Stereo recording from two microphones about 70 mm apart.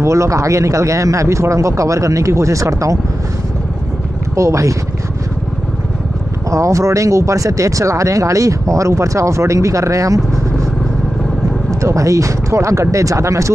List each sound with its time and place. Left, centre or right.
0.0 s speech: right
4.4 s speech: right
6.5 s speech: right
11.8 s speech: right